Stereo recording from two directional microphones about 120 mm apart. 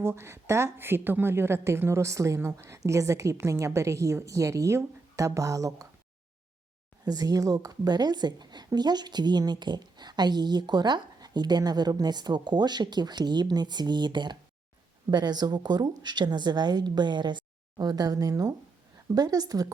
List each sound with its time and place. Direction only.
0.0 s a woman's voice: 20° right (ahead or behind)
7.0 s speech: 35° right (ahead or behind)